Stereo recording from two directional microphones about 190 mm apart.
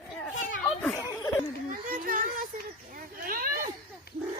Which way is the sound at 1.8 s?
50° right (ahead or behind).